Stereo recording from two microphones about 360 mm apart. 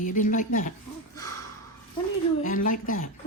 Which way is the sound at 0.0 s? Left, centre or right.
Left.